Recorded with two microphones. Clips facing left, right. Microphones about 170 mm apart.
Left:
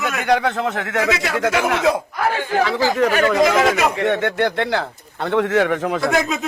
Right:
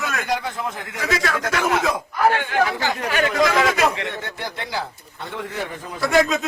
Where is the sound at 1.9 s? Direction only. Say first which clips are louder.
Right 1 dB; 40° left (ahead or behind).